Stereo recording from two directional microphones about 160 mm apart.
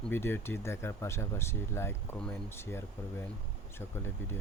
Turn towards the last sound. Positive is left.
turn(degrees=15)  # may be behind; listen again after turning